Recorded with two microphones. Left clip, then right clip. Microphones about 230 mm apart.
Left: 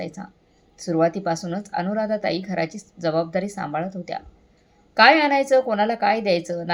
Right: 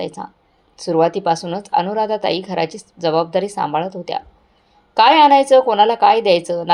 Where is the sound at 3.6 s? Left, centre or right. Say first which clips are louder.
Right 8 dB; right.